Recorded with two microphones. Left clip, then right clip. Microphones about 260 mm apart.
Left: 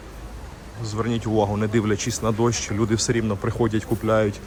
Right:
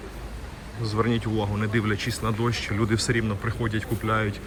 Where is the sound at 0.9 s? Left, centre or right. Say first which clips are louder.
Left 1 dB; centre.